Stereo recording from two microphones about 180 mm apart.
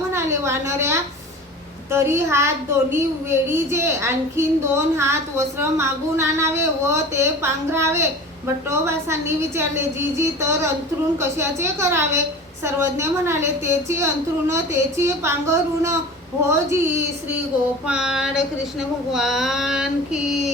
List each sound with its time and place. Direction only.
0.1 s a woman's voice: 15° right (ahead or behind)
17.8 s female singing: 5° right (ahead or behind)